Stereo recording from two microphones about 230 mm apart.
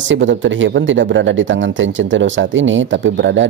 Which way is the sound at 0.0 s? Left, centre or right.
Right.